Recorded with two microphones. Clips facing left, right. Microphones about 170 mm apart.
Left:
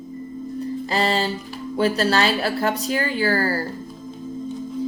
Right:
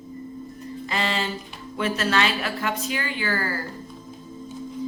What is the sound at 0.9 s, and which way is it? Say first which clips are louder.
Speech: left 5 dB; 35° left (ahead or behind).